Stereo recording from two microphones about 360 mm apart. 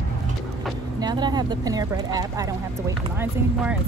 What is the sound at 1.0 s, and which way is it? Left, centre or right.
Vehicle, centre.